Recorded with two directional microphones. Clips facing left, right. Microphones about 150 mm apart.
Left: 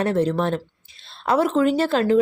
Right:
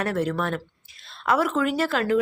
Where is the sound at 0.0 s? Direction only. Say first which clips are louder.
Left 5 dB; 30° left (ahead or behind).